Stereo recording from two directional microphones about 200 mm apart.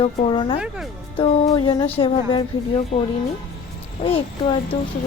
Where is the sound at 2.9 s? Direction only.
35° left (ahead or behind).